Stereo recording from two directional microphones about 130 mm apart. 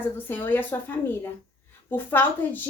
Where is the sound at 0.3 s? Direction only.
15° left (ahead or behind).